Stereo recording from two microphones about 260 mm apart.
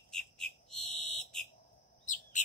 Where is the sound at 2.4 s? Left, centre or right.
Left.